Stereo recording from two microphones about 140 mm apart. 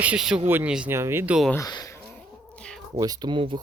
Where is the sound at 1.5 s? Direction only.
25° left (ahead or behind).